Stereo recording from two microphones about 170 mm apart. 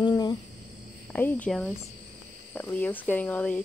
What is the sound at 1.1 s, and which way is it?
Speech, 10° left (ahead or behind).